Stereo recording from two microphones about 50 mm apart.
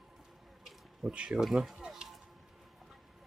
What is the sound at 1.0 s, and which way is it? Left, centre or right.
Speech, right.